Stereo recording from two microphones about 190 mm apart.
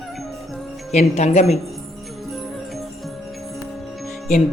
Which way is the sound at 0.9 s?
35° left (ahead or behind).